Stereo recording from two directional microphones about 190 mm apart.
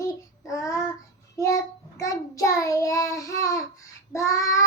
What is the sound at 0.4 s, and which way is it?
Child singing, 15° left (ahead or behind).